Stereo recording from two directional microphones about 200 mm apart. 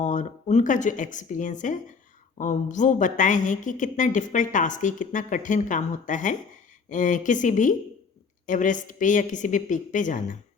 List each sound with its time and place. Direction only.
0.0 s a woman's voice: 40° left (ahead or behind)